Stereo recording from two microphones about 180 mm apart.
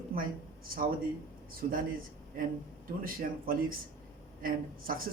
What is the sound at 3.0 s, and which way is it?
Speech, 50° right (ahead or behind).